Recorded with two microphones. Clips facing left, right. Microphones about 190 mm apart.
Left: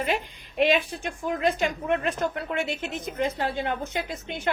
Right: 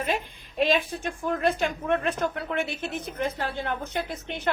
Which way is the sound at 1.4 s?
15° left (ahead or behind).